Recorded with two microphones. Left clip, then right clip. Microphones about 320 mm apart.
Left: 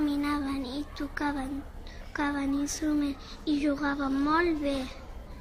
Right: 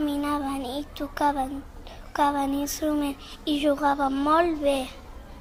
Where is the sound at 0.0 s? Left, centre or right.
Centre.